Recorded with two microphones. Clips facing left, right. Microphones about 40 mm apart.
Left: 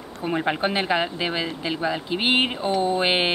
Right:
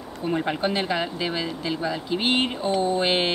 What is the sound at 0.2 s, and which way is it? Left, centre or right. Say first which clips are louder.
Speech: left 1 dB; centre.